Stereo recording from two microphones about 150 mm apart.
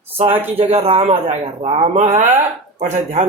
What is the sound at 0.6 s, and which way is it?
Speech, 40° right (ahead or behind).